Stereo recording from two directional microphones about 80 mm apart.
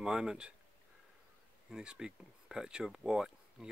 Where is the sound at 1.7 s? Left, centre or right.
Centre.